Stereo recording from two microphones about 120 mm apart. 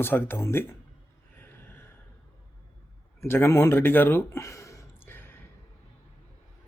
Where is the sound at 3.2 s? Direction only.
20° left (ahead or behind).